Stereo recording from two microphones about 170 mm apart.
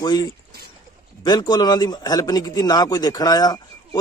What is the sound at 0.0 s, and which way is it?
Speech, 25° left (ahead or behind).